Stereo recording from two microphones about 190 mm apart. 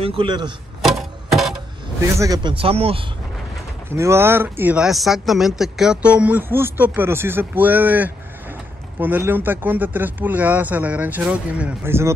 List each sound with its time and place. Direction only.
0.0 s speech: 30° right (ahead or behind)
0.8 s music: centre (ahead or behind)
2.1 s speech: 20° right (ahead or behind)
3.9 s speech: 15° right (ahead or behind)